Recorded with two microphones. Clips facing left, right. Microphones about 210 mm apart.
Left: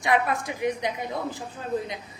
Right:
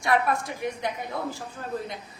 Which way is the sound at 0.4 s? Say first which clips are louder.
Left 3 dB; 15° left (ahead or behind).